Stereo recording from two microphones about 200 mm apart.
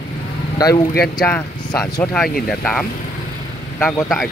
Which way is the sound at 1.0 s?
5° left (ahead or behind).